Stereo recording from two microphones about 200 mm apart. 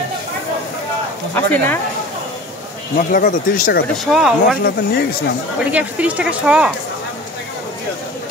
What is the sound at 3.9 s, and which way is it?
Speech, centre (ahead or behind).